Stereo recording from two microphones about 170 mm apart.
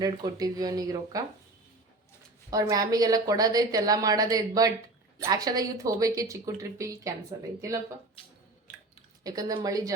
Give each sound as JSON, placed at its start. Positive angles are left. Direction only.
{"t": 0.0, "sound": "a woman's voice", "side_deg": -20}
{"t": 2.5, "sound": "a woman's voice", "side_deg": -20}
{"t": 9.2, "sound": "a woman's voice", "side_deg": -20}